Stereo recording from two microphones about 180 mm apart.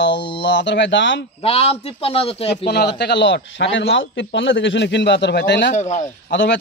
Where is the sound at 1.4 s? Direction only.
35° left (ahead or behind).